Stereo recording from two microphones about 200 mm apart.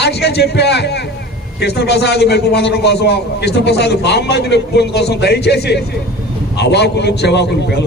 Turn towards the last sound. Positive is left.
turn(degrees=55)  # may be behind; listen again after turning